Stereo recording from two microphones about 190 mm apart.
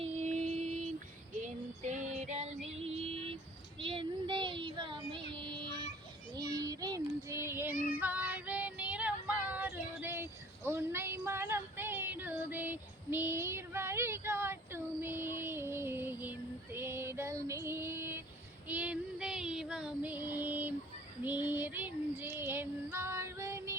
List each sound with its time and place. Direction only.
0.0 s music: 35° right (ahead or behind)
1.4 s child singing: 40° right (ahead or behind); by 7.8 s 10° right (ahead or behind)
7.9 s female singing: 10° right (ahead or behind)
18.7 s child singing: 5° right (ahead or behind)